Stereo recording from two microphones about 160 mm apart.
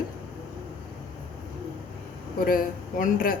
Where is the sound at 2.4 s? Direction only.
60° left (ahead or behind).